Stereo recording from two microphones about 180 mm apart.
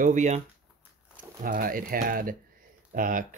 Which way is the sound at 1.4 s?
50° right (ahead or behind).